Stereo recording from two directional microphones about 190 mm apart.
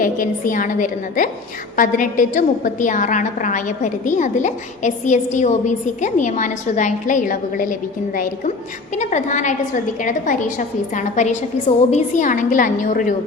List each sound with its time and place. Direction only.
0.0 s a woman's voice: 45° left (ahead or behind)